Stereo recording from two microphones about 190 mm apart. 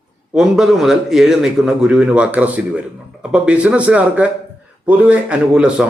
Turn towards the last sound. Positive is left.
turn(degrees=-5)  # may be behind; listen again after turning